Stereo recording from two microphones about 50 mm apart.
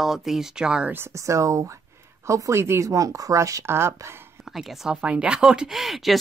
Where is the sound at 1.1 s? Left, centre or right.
Right.